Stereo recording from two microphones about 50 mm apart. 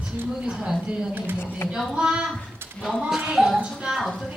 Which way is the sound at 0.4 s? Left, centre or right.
Centre.